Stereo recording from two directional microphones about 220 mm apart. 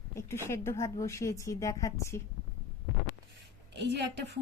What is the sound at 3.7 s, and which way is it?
Speech, 50° right (ahead or behind).